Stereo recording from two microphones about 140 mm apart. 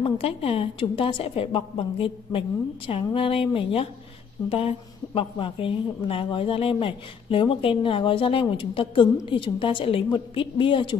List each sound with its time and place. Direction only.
0.0 s a woman's voice: 45° left (ahead or behind)